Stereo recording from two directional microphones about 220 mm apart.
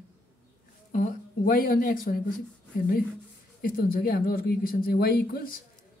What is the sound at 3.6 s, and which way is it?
A man's voice, 40° left (ahead or behind).